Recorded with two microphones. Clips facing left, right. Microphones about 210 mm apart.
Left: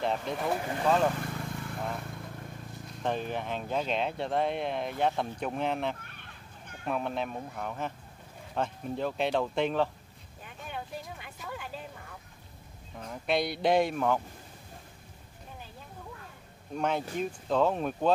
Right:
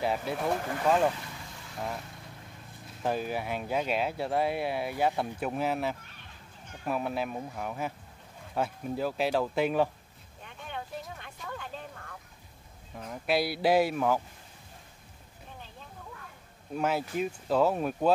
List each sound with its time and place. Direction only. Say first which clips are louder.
0.0 s speech: right 1 dB; 5° right (ahead or behind)
1.1 s vehicle: left 8 dB; 55° left (ahead or behind)
3.0 s speech: right 1 dB; 5° right (ahead or behind)
10.4 s vehicle: even; 5° left (ahead or behind)
12.9 s speech: right 1 dB; 5° right (ahead or behind)
16.7 s speech: right 1 dB; 5° right (ahead or behind)